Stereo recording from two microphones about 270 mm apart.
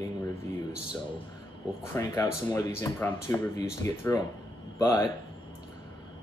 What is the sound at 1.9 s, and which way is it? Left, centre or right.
Speech, centre.